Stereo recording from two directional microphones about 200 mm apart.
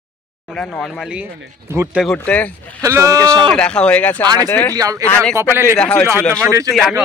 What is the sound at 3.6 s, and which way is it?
Speech, 5° left (ahead or behind).